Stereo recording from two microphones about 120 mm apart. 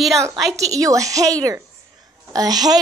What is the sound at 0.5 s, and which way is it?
A woman's voice, 30° right (ahead or behind).